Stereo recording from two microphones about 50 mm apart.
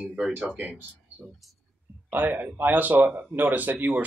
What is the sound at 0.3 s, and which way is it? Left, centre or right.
Speech, right.